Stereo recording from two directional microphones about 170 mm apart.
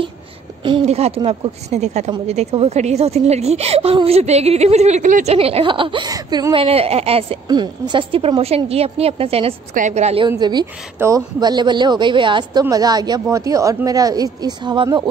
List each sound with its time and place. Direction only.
0.7 s a woman's voice: 35° right (ahead or behind)
6.5 s a woman's voice: 35° right (ahead or behind)
10.3 s a woman's voice: 25° right (ahead or behind)